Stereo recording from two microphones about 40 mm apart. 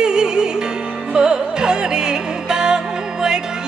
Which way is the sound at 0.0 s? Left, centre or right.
Centre.